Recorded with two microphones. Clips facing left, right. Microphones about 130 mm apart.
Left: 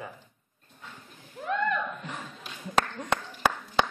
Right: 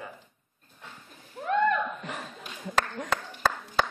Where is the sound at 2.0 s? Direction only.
75° right (ahead or behind).